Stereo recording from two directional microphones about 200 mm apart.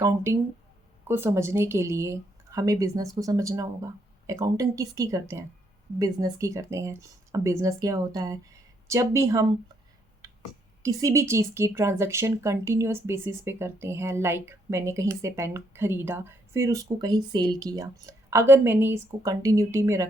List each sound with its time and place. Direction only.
0.0 s speech: 15° right (ahead or behind)
10.8 s speech: 15° right (ahead or behind)